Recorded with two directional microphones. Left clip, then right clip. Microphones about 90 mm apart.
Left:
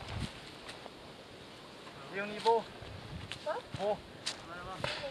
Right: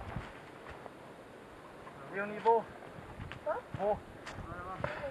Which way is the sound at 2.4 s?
15° left (ahead or behind).